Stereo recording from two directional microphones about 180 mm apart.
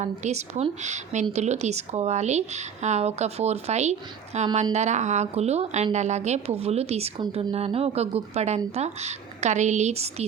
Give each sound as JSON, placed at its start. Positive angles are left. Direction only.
{"t": 0.0, "sound": "speech", "side_deg": -40}